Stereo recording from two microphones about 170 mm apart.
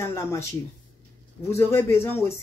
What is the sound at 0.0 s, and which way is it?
Speech, 15° left (ahead or behind).